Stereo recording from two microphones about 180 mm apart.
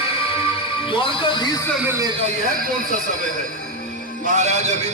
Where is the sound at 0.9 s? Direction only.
25° left (ahead or behind).